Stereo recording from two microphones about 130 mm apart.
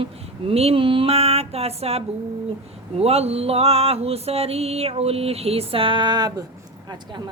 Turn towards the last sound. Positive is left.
turn(degrees=-35)  # may be behind; listen again after turning